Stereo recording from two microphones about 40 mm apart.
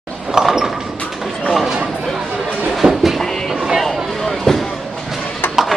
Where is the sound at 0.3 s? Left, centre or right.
Centre.